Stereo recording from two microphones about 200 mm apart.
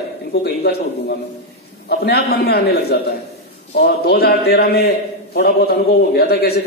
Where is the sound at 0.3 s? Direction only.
55° left (ahead or behind).